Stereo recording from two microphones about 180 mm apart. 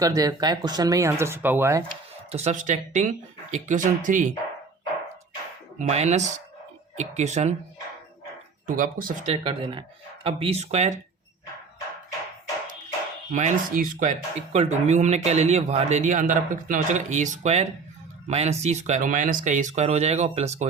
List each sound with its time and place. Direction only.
0.0 s speech: 20° right (ahead or behind)
2.3 s speech: 40° right (ahead or behind)
5.9 s speech: 40° right (ahead or behind)
8.6 s speech: 50° right (ahead or behind)
9.3 s speech: 30° right (ahead or behind)
13.3 s speech: 45° right (ahead or behind)